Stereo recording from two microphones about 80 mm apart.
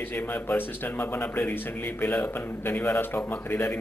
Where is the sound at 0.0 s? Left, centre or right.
Left.